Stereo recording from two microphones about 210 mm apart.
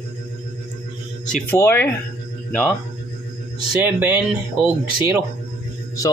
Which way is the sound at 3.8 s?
10° right (ahead or behind).